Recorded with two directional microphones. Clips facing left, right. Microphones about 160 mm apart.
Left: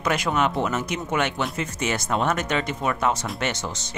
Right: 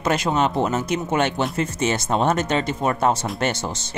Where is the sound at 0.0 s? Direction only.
25° right (ahead or behind).